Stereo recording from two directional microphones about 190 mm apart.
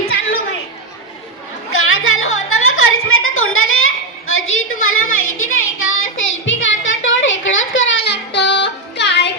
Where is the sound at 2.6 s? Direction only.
90° left.